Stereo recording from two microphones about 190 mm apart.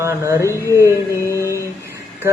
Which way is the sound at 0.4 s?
15° left (ahead or behind).